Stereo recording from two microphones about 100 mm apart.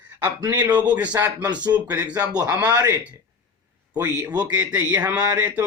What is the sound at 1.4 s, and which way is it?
Speech, 45° right (ahead or behind).